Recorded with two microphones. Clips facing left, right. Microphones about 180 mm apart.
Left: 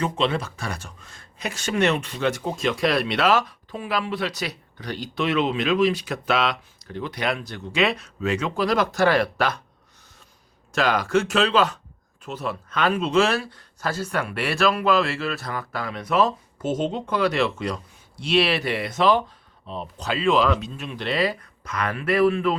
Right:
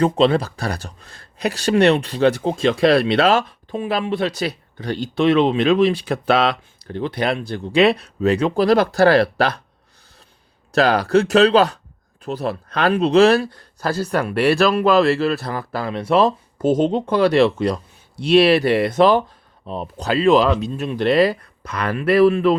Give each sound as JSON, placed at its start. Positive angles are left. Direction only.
{"t": 0.0, "sound": "speech", "side_deg": -35}
{"t": 10.7, "sound": "speech", "side_deg": -35}
{"t": 21.4, "sound": "speech", "side_deg": -35}